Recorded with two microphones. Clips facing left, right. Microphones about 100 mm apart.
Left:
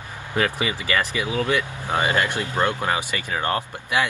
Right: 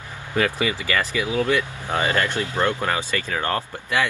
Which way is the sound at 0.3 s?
20° left (ahead or behind).